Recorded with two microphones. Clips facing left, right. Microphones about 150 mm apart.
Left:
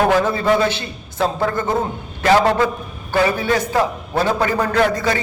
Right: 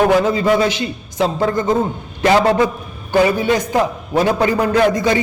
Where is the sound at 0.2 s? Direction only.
15° right (ahead or behind).